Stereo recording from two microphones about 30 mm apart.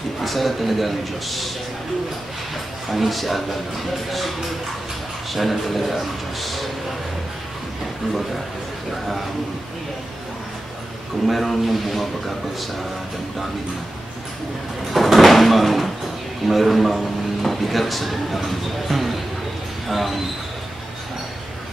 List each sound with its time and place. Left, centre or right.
0.2 s speech: centre
2.9 s speech: centre
5.3 s speech: centre
11.2 s speech: centre
14.9 s a sound: centre
16.4 s speech: centre